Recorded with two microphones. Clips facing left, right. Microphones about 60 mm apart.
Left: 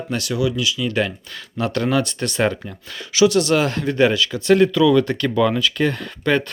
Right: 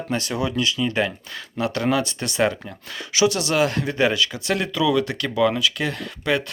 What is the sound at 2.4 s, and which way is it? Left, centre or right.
Speech, centre.